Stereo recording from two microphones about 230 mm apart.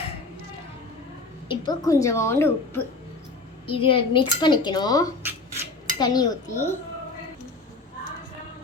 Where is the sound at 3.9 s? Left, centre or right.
Left.